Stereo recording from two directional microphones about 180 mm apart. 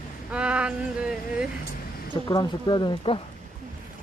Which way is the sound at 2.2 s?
25° left (ahead or behind).